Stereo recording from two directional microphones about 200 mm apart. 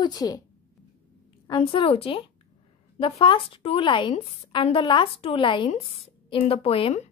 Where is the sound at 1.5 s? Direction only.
25° left (ahead or behind).